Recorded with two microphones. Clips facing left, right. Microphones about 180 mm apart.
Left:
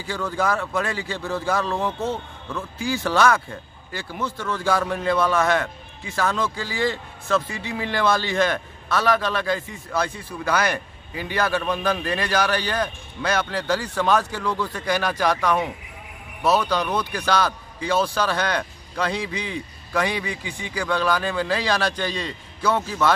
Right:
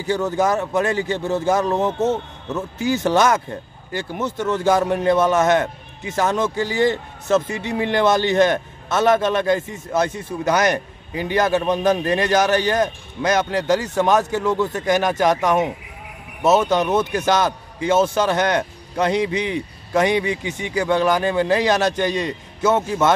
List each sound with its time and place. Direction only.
0.1 s a man's voice: 20° right (ahead or behind)